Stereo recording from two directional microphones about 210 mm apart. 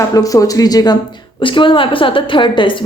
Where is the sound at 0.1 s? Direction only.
15° left (ahead or behind).